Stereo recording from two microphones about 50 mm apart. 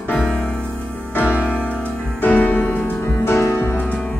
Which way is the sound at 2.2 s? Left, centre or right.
Left.